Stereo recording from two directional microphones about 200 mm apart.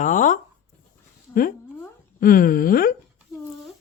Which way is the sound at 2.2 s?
45° left (ahead or behind).